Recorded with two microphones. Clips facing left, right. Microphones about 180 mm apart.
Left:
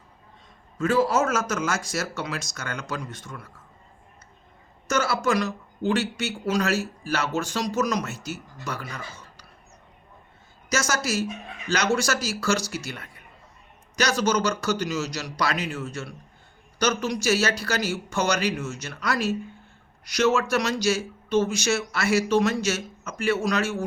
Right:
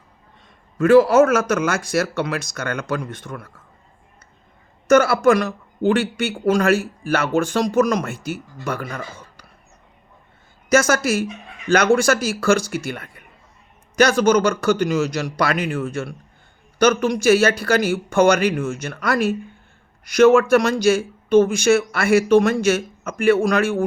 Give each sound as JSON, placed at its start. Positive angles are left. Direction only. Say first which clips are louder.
{"t": 0.8, "sound": "speech", "louder": "right 10 dB", "side_deg": -65}
{"t": 4.9, "sound": "speech", "louder": "right 10 dB", "side_deg": -55}
{"t": 10.7, "sound": "speech", "louder": "right 9 dB", "side_deg": -55}